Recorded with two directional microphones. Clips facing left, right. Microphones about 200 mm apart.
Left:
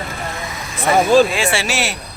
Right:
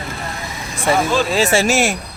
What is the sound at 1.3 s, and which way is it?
Speech, 40° right (ahead or behind).